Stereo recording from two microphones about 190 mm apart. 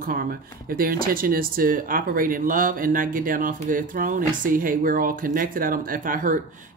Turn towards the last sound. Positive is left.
turn(degrees=-45)  # may be behind; listen again after turning